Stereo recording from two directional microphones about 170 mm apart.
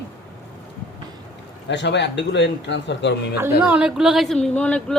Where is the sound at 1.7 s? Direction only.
90° left.